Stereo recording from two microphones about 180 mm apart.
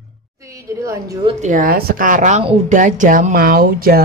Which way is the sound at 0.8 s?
20° right (ahead or behind).